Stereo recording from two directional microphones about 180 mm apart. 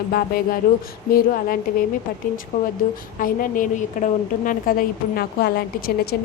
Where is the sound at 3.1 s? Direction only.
50° left (ahead or behind).